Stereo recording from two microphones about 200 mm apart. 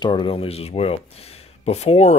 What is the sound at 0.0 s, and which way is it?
Speech, 25° left (ahead or behind).